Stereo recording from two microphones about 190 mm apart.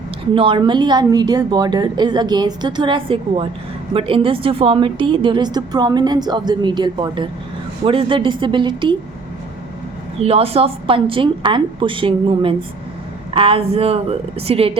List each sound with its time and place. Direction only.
0.3 s a woman's voice: 25° right (ahead or behind)
10.2 s a woman's voice: 30° right (ahead or behind)